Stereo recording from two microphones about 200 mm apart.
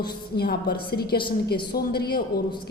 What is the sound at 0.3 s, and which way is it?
A woman's voice, 55° left (ahead or behind).